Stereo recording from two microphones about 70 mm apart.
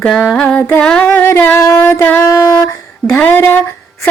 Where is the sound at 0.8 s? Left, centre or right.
Centre.